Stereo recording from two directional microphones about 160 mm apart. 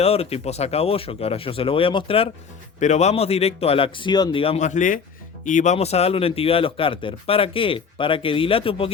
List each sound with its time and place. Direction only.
0.0 s speech: 40° left (ahead or behind)